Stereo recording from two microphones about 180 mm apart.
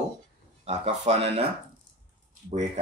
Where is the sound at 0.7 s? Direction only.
35° right (ahead or behind).